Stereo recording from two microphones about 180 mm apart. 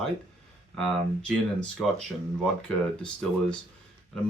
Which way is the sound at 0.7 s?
Centre (ahead or behind).